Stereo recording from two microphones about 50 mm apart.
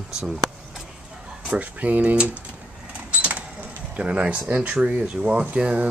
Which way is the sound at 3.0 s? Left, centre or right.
Right.